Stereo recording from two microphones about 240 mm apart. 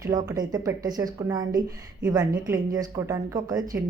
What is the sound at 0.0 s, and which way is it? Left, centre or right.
A woman's voice, centre.